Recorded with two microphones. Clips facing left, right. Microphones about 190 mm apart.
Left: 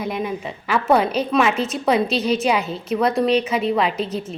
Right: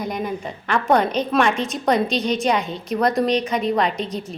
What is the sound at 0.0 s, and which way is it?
A woman's voice, centre (ahead or behind).